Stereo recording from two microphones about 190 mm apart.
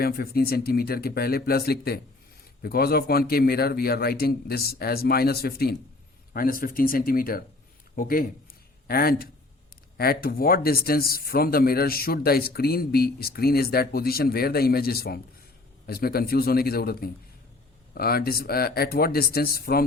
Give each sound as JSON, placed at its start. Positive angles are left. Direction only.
{"t": 0.0, "sound": "speech", "side_deg": 55}